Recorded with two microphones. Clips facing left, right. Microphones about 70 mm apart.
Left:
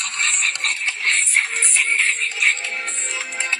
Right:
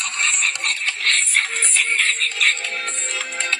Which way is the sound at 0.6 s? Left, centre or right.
Centre.